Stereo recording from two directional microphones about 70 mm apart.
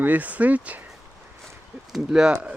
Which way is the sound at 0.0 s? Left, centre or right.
Right.